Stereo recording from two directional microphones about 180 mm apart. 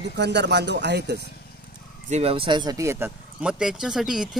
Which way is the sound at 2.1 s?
35° right (ahead or behind).